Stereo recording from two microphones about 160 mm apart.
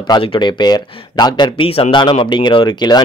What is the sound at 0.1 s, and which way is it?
Speech, 30° left (ahead or behind).